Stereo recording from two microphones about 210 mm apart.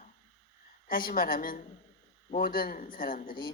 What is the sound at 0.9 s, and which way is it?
A man's voice, 40° left (ahead or behind).